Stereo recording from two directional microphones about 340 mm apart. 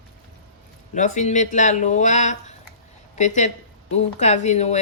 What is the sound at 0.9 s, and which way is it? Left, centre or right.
Speech, left.